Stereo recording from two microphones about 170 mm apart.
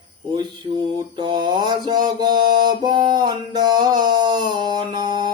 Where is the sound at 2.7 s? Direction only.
25° right (ahead or behind).